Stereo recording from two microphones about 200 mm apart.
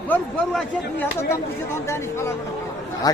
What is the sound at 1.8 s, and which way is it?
Speech, 15° left (ahead or behind).